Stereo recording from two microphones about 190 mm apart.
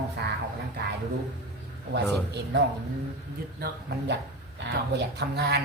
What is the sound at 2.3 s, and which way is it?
Speech, 60° right (ahead or behind).